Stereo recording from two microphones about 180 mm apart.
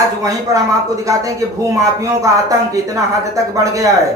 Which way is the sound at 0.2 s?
20° right (ahead or behind).